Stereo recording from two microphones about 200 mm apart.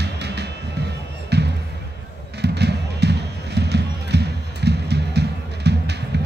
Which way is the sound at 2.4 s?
55° right (ahead or behind).